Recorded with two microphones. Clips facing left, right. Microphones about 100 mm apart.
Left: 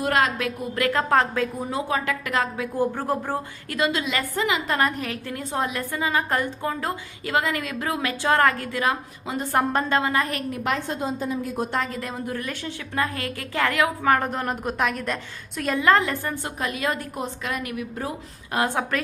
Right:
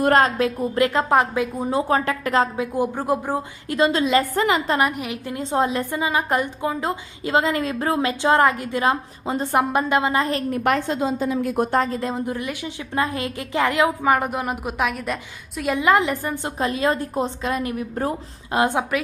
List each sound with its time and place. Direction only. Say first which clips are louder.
0.0 s a woman's voice: right 5 dB; 40° right (ahead or behind); by 1.6 s 15° right (ahead or behind)
1.7 s a woman's voice: right 8 dB; 35° right (ahead or behind)
2.7 s a woman's voice: right 2 dB; 15° right (ahead or behind)
3.8 s a woman's voice: right 6 dB; 35° right (ahead or behind)
4.7 s a woman's voice: right 2 dB; 15° right (ahead or behind); by 9.6 s 30° right (ahead or behind)
9.7 s a woman's voice: right 3 dB; 20° right (ahead or behind)
10.5 s a woman's voice: right 5 dB; 60° right (ahead or behind)
11.7 s a woman's voice: right 6 dB; 35° right (ahead or behind); by 15.7 s 5° right (ahead or behind)
15.7 s a woman's voice: right 2 dB; 15° right (ahead or behind); by 18.1 s 40° right (ahead or behind)
18.5 s a woman's voice: right 4 dB; 20° right (ahead or behind)